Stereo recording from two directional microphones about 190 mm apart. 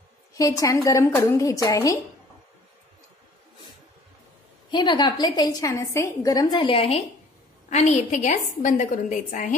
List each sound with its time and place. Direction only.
0.3 s a woman's voice: 15° left (ahead or behind)
4.6 s a woman's voice: 25° left (ahead or behind); by 9.6 s 40° left (ahead or behind)